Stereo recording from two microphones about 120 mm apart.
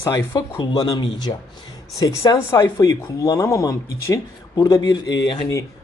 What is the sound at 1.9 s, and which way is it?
Speech, 30° left (ahead or behind).